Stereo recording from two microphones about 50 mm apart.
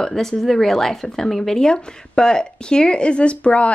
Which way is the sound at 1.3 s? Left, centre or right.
Centre.